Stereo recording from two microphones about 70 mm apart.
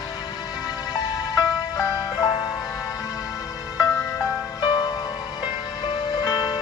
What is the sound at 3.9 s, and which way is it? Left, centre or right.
Music, left.